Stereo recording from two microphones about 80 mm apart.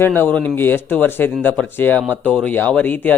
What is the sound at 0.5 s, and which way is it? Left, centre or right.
A man's voice, left.